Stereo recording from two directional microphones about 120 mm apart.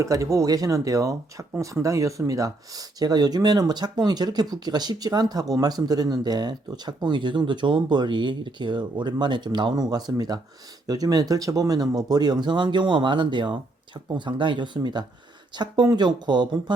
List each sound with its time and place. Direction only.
0.0 s speech: 25° right (ahead or behind)